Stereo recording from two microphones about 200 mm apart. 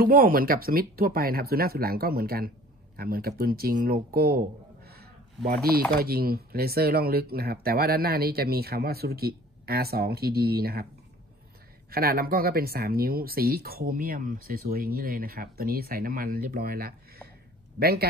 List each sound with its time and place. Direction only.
0.0 s speech: 45° right (ahead or behind)
11.9 s speech: 50° right (ahead or behind)